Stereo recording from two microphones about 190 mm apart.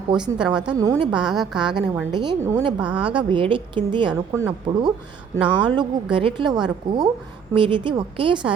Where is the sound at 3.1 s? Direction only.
25° right (ahead or behind).